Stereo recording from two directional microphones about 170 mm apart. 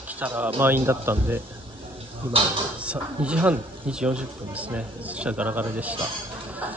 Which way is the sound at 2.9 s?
5° right (ahead or behind).